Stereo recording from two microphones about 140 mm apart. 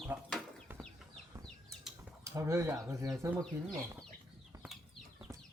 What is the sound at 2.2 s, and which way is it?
Speech, 20° right (ahead or behind).